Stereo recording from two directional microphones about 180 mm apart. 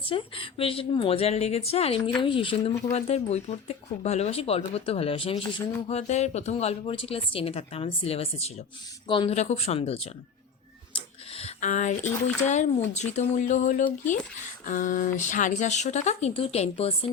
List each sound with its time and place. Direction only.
0.0 s speech: 30° left (ahead or behind)